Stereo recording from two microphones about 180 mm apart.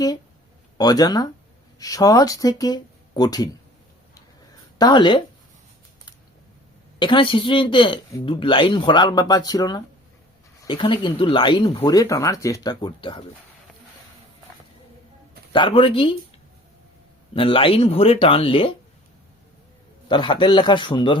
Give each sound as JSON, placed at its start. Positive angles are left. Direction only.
{"t": 0.8, "sound": "speech", "side_deg": 20}
{"t": 4.8, "sound": "speech", "side_deg": 25}
{"t": 7.0, "sound": "speech", "side_deg": 30}
{"t": 15.5, "sound": "speech", "side_deg": 30}
{"t": 17.3, "sound": "speech", "side_deg": 30}
{"t": 20.1, "sound": "speech", "side_deg": 25}